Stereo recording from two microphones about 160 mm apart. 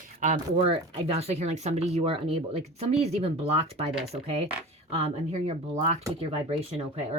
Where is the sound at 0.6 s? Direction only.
40° right (ahead or behind).